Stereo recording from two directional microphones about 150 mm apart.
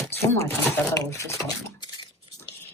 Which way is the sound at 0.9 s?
20° left (ahead or behind).